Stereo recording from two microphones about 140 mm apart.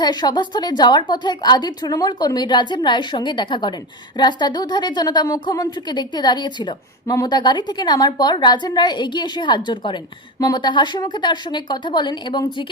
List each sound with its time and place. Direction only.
0.0 s a woman's voice: 30° left (ahead or behind)